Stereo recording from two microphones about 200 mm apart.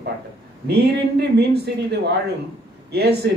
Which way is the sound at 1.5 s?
55° right (ahead or behind).